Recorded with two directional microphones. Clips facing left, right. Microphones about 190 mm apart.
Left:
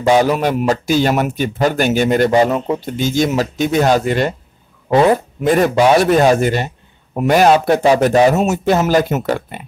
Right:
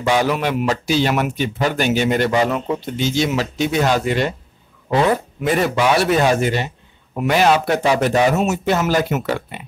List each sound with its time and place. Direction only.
0.0 s a man's voice: 40° left (ahead or behind)